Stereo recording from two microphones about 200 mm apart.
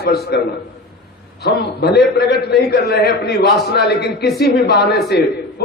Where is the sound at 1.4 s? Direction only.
55° left (ahead or behind).